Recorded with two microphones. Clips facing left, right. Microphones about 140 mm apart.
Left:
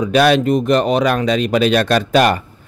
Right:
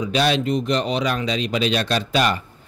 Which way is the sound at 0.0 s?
55° left (ahead or behind).